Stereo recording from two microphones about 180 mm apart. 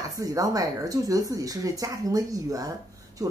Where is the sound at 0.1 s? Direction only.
20° right (ahead or behind).